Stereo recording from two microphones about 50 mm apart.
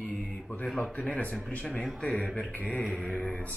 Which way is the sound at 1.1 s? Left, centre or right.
Left.